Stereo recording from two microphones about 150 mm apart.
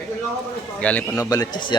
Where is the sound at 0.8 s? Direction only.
10° left (ahead or behind).